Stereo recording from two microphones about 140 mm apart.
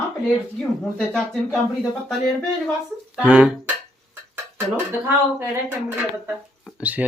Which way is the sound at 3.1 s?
10° right (ahead or behind).